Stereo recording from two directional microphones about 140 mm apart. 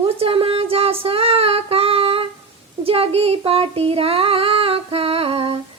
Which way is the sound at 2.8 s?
45° right (ahead or behind).